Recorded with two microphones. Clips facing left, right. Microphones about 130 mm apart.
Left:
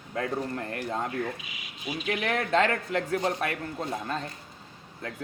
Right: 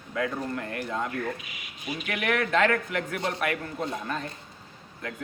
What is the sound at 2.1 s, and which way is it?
A man's voice, 30° left (ahead or behind).